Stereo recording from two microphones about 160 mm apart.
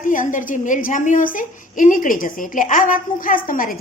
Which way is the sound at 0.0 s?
55° left (ahead or behind).